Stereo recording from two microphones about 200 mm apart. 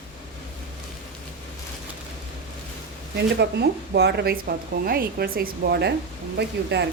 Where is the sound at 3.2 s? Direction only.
55° right (ahead or behind).